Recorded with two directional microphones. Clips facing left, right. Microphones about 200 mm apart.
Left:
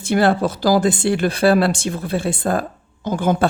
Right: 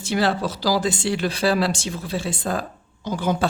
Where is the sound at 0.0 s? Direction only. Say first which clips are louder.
Left 5 dB; 55° left (ahead or behind).